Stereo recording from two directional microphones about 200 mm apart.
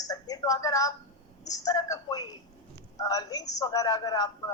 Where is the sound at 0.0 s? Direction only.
20° left (ahead or behind).